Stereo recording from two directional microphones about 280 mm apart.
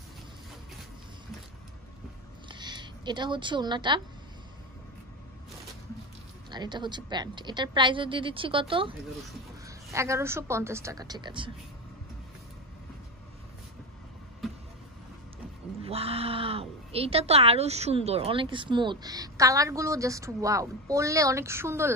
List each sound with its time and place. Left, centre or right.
2.4 s a sound: centre
6.5 s speech: centre
15.8 s speech: right